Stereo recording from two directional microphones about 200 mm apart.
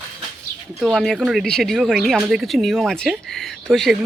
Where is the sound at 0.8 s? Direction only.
Centre (ahead or behind).